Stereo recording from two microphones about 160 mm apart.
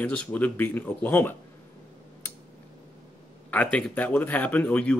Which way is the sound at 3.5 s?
10° left (ahead or behind).